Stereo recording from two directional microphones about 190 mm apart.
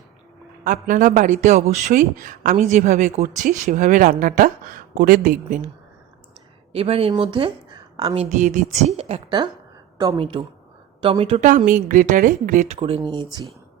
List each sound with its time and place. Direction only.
0.6 s speech: 45° right (ahead or behind)
6.7 s a woman's voice: 30° right (ahead or behind)